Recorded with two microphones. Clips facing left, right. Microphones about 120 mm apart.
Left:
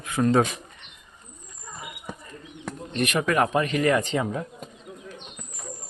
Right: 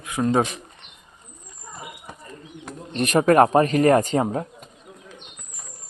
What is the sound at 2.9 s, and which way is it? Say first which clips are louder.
A man's voice: right 7 dB; 35° right (ahead or behind).